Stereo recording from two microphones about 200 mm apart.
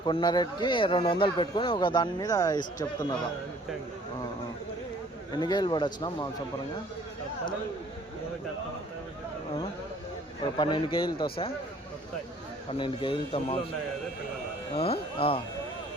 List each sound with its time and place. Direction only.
0.0 s speech: 20° left (ahead or behind)
5.3 s speech: 20° left (ahead or behind)
10.4 s speech: 20° left (ahead or behind)
12.6 s speech: 25° left (ahead or behind)
14.8 s speech: 30° left (ahead or behind)